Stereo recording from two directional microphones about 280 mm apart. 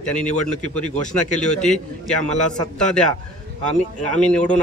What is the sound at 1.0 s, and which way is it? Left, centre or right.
Speech, left.